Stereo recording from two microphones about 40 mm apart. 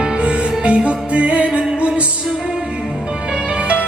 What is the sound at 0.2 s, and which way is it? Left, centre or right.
Music, right.